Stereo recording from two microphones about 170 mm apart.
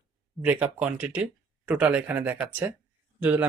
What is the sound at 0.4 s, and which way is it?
Speech, 10° right (ahead or behind).